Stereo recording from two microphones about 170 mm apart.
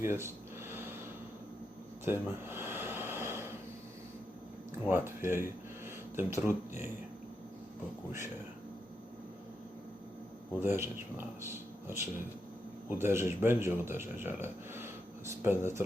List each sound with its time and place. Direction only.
0.0 s speech: 15° right (ahead or behind)
0.7 s a sound: 15° right (ahead or behind)
2.0 s gasp: 15° right (ahead or behind)
4.9 s speech: 15° right (ahead or behind)
10.6 s speech: 15° right (ahead or behind)